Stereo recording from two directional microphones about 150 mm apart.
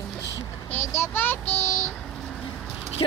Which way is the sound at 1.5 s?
20° left (ahead or behind).